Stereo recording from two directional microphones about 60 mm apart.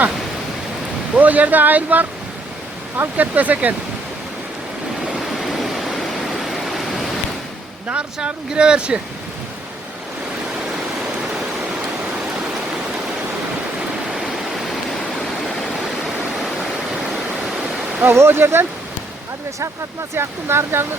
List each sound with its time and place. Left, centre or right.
1.1 s speech: right
5.1 s a sound: centre
7.9 s speech: centre
10.7 s stream: centre
14.2 s stream: centre
18.0 s speech: right
20.1 s speech: right